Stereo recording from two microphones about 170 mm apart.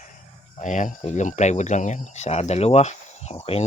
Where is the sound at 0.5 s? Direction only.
45° left (ahead or behind).